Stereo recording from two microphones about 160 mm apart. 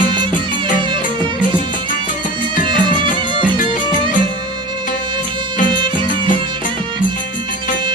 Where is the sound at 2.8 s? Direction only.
30° right (ahead or behind).